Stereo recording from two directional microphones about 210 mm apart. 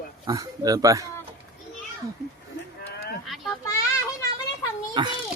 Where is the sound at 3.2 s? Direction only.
Centre (ahead or behind).